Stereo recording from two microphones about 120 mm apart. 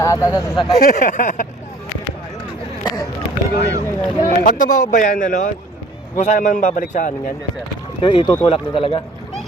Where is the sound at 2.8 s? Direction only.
30° left (ahead or behind).